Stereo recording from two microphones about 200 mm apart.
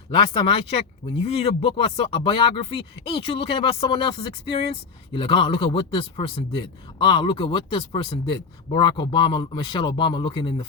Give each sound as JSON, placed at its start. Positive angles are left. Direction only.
{"t": 0.3, "sound": "speech", "side_deg": 25}